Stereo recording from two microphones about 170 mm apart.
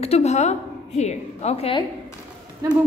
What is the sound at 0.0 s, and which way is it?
A woman's voice, 40° left (ahead or behind).